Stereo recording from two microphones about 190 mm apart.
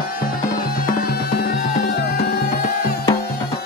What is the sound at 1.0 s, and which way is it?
Music, 55° left (ahead or behind).